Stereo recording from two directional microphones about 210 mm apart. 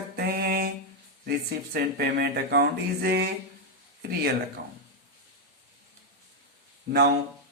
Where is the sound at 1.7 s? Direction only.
50° right (ahead or behind).